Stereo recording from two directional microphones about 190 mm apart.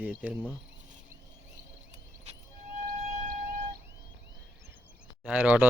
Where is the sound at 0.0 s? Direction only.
10° right (ahead or behind).